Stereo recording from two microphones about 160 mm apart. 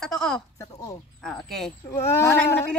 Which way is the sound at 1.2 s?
5° left (ahead or behind).